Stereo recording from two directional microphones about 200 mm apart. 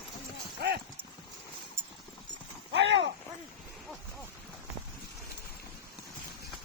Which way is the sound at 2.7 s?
60° right (ahead or behind).